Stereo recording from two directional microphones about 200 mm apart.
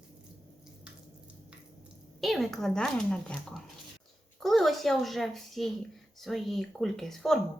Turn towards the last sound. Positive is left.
turn(degrees=0)  # may be behind; listen again after turning